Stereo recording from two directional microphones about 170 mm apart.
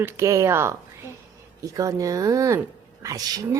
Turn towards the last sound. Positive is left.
turn(degrees=-20)  # may be behind; listen again after turning